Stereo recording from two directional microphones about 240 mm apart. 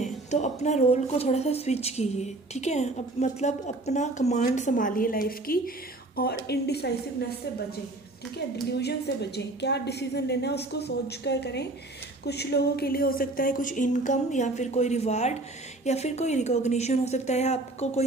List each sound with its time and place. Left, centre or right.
0.0 s a woman's voice: left
8.7 s a woman's voice: left